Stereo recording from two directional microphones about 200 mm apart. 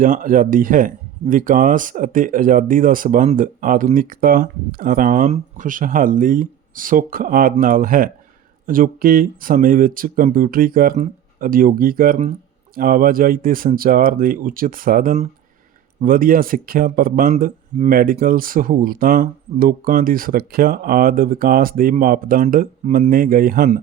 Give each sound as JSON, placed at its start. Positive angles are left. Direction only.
{"t": 0.0, "sound": "speech", "side_deg": -45}